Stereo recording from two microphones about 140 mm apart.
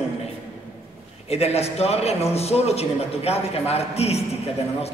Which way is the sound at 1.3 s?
45° left (ahead or behind).